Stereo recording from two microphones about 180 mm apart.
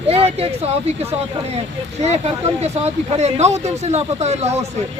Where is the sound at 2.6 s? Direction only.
35° right (ahead or behind).